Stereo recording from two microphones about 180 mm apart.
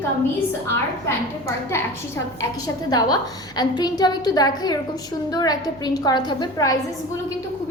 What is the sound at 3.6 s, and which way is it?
A woman's voice, 20° left (ahead or behind).